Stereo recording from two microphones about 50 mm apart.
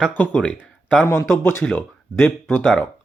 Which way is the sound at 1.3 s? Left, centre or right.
Left.